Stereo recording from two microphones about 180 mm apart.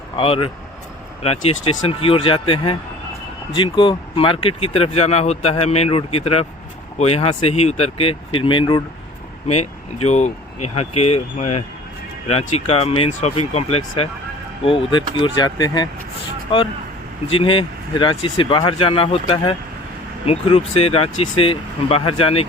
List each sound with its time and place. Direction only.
0.2 s speech: 30° left (ahead or behind)
10.1 s speech: 40° left (ahead or behind)